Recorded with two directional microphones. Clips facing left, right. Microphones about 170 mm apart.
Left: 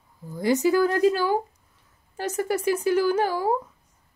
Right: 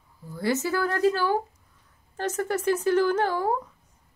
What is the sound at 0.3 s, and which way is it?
Speech, 15° left (ahead or behind).